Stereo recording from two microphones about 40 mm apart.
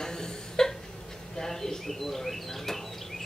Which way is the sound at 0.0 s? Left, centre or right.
Centre.